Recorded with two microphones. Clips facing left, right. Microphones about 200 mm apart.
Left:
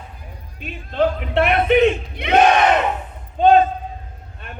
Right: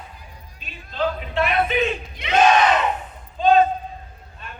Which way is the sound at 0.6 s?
60° left (ahead or behind).